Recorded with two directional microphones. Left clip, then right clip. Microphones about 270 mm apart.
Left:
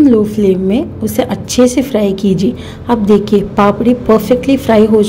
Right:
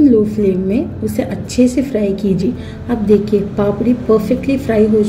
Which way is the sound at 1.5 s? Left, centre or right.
Left.